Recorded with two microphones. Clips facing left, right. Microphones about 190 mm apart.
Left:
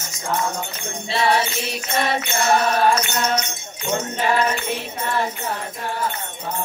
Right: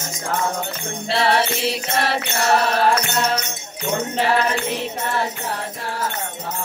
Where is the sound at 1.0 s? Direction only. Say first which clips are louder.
Right 1 dB; 70° right (ahead or behind).